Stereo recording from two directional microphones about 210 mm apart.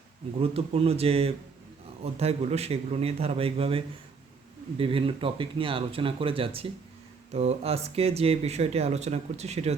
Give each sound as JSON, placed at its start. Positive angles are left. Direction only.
{"t": 0.3, "sound": "speech", "side_deg": -30}